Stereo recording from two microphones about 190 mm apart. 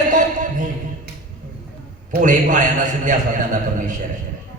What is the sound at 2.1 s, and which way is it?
A man's voice, 40° right (ahead or behind).